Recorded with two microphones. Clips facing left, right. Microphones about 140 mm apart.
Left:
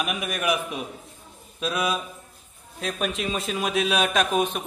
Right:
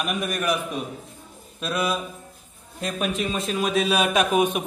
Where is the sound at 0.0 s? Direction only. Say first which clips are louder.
Right 1 dB; 5° left (ahead or behind).